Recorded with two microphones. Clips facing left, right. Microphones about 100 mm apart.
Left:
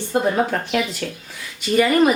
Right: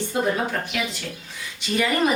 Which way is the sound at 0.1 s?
40° left (ahead or behind).